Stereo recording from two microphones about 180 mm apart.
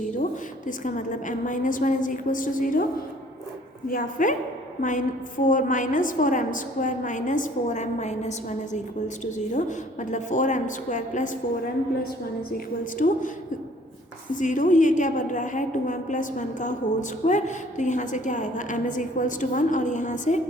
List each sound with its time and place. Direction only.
0.7 s a woman's voice: 45° left (ahead or behind)
3.8 s a woman's voice: 50° left (ahead or behind)
14.3 s a woman's voice: 45° left (ahead or behind)